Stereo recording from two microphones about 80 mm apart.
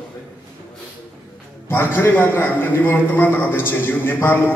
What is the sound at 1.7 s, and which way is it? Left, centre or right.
A man's voice, left.